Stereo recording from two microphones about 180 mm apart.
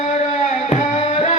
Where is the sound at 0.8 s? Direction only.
40° left (ahead or behind).